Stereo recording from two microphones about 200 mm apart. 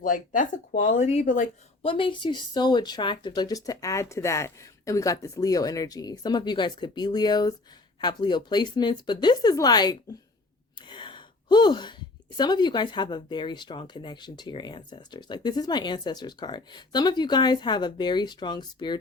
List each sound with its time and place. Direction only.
0.0 s speech: 40° left (ahead or behind)
1.8 s speech: 25° left (ahead or behind)